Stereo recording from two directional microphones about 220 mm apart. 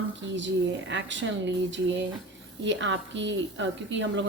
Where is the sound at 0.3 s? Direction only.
55° right (ahead or behind).